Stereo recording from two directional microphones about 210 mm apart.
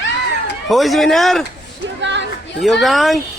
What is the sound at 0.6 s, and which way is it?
Speech, centre (ahead or behind).